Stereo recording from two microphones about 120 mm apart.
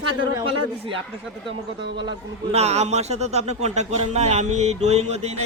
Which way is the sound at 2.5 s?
60° right (ahead or behind).